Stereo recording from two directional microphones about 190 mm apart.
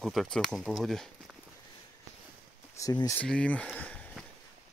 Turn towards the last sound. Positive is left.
turn(degrees=5)  # may be behind; listen again after turning